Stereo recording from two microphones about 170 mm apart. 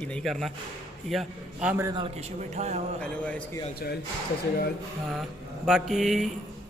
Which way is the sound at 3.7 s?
70° left (ahead or behind).